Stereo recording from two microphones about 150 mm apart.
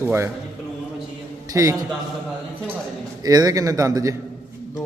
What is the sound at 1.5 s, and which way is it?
Speech, 20° right (ahead or behind).